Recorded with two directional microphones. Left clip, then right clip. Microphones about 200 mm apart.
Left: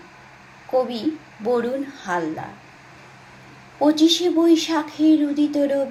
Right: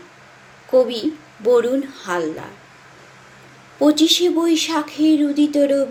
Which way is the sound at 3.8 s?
35° right (ahead or behind).